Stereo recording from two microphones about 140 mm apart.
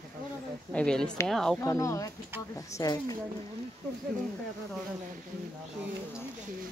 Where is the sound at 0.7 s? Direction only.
5° left (ahead or behind).